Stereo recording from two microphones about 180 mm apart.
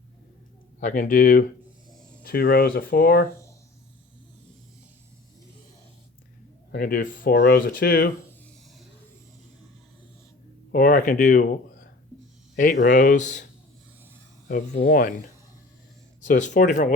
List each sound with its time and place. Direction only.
0.8 s speech: 45° left (ahead or behind)
6.7 s speech: 55° left (ahead or behind)
7.3 s speech: 60° left (ahead or behind)
10.7 s speech: 50° left (ahead or behind)
14.4 s speech: 45° left (ahead or behind)